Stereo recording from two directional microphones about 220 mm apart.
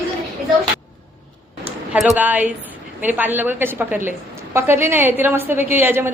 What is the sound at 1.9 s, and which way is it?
A woman's voice, 5° right (ahead or behind).